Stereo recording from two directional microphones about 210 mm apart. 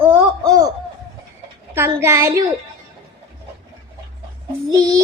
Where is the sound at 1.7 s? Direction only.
10° right (ahead or behind).